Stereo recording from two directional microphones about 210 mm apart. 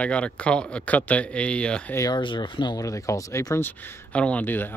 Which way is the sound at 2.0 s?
20° left (ahead or behind).